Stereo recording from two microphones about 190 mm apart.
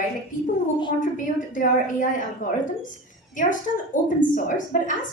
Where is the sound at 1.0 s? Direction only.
45° left (ahead or behind).